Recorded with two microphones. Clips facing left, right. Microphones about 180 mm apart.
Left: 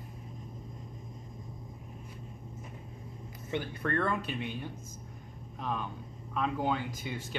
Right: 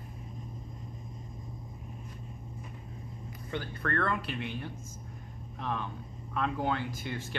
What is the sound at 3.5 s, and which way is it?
Speech, 15° left (ahead or behind).